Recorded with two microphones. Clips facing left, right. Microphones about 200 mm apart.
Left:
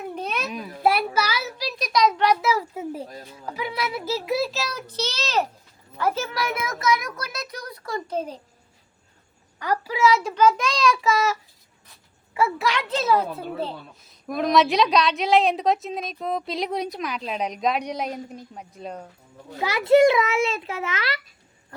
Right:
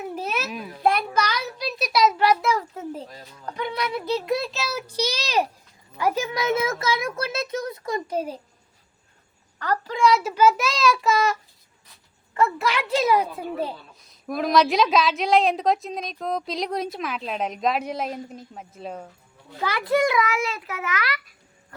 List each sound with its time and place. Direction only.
0.0 s a child's voice: 5° right (ahead or behind)
9.6 s a woman's voice: 10° left (ahead or behind); by 13.7 s 15° right (ahead or behind)
14.3 s a woman's voice: centre (ahead or behind)
19.7 s a child's voice: 25° left (ahead or behind)